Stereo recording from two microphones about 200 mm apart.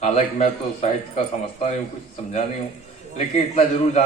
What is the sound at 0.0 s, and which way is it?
A man's voice, 35° left (ahead or behind).